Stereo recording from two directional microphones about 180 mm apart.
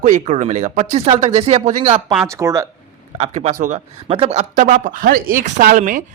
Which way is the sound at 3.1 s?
35° right (ahead or behind).